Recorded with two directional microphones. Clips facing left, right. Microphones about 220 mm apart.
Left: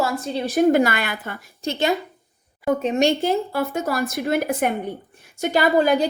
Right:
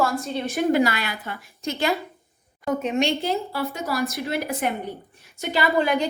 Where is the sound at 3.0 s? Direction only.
45° left (ahead or behind).